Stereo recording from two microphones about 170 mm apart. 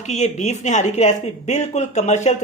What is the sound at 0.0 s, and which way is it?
Speech, 45° left (ahead or behind).